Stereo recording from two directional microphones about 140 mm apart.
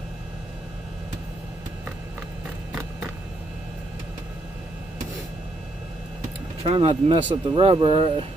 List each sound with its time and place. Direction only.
6.6 s speech: 45° right (ahead or behind)